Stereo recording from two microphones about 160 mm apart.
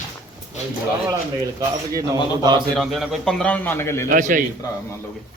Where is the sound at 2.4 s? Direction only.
25° right (ahead or behind).